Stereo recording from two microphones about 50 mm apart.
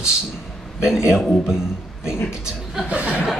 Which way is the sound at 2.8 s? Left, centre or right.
Right.